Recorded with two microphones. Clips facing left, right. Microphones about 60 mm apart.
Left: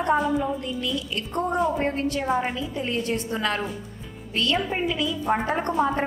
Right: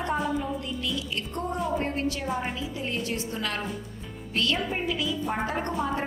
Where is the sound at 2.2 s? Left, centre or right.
Left.